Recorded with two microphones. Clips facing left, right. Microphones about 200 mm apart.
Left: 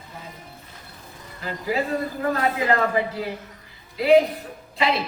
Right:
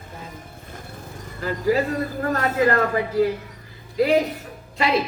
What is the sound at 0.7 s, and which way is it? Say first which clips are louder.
Music: right 7 dB; 50° right (ahead or behind).